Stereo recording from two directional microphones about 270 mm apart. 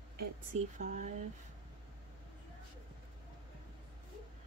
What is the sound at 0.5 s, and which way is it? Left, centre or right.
Speech, right.